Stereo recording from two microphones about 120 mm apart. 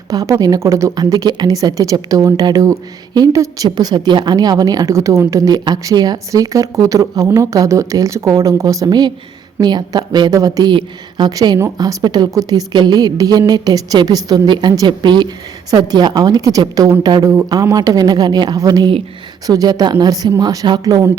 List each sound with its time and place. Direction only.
0.1 s a woman's voice: 30° right (ahead or behind)